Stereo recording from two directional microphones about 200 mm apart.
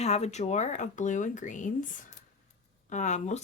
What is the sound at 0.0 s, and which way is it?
Speech, 35° left (ahead or behind).